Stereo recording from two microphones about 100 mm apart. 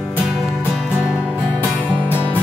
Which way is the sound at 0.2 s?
5° right (ahead or behind).